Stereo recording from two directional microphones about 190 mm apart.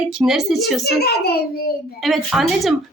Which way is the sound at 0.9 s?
55° left (ahead or behind).